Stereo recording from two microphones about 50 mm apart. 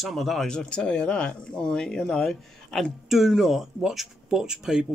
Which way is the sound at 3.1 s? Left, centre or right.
Centre.